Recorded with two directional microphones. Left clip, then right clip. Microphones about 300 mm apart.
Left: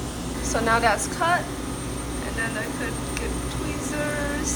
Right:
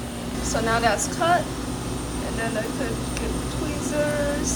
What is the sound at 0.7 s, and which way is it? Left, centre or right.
Speech, centre.